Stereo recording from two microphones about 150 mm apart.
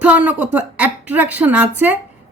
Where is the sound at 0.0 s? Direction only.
10° right (ahead or behind).